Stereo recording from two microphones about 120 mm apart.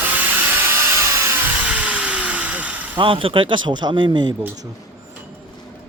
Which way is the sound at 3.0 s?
50° right (ahead or behind).